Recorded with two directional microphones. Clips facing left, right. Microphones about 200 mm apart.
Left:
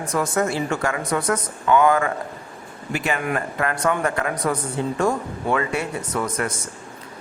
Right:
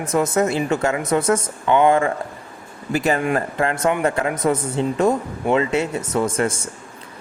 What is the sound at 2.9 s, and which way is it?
Speech, 35° right (ahead or behind).